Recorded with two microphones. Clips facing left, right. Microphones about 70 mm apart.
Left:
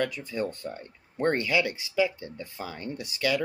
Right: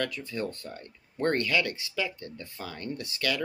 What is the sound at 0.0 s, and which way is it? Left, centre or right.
Speech, centre.